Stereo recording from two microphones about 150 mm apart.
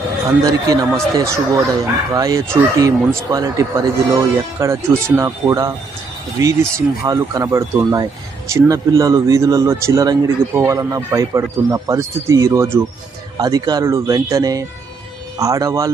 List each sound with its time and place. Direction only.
0.3 s speech: 25° right (ahead or behind)